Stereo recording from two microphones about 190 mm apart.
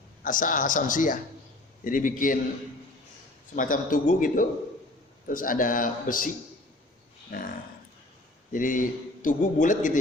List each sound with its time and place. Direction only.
0.2 s a man's voice: 45° left (ahead or behind)
3.5 s a man's voice: 45° left (ahead or behind)
7.3 s a man's voice: 45° left (ahead or behind)
8.5 s a man's voice: 45° left (ahead or behind)